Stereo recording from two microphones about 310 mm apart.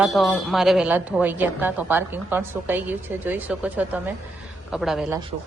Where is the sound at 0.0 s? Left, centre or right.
Centre.